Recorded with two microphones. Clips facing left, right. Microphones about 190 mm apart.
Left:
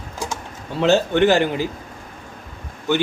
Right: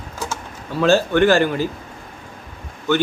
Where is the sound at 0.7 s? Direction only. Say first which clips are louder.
Right 1 dB; 20° left (ahead or behind).